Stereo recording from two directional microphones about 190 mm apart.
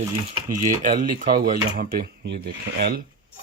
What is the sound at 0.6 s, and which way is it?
Speech, 45° right (ahead or behind).